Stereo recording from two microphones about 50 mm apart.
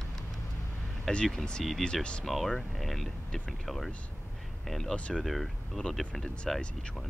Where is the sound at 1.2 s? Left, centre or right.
Centre.